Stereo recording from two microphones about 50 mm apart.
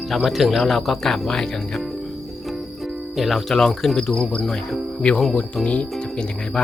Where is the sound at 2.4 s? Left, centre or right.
Centre.